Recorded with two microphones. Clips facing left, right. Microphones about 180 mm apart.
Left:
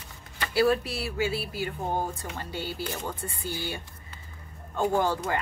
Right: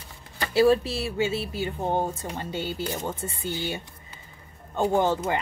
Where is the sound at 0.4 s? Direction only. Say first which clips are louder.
Right 4 dB; 25° right (ahead or behind).